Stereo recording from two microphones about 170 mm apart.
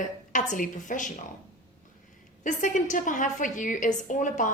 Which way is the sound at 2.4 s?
50° left (ahead or behind).